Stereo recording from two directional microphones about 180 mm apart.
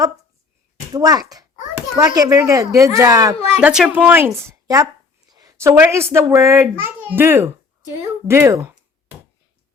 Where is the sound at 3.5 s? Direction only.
5° right (ahead or behind).